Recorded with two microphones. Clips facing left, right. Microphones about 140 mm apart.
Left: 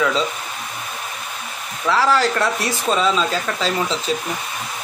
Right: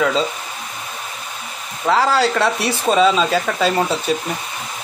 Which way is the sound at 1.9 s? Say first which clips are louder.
Right 1 dB; 50° right (ahead or behind).